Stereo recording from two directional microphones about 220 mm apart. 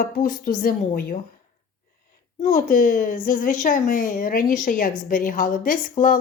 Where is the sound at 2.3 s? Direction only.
35° left (ahead or behind).